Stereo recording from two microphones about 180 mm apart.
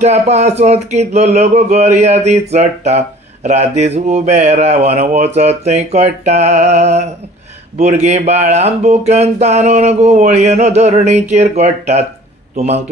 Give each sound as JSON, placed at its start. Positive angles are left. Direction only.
{"t": 0.0, "sound": "speech", "side_deg": -40}